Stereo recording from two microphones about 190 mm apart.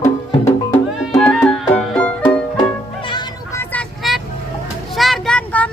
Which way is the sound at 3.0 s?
25° left (ahead or behind).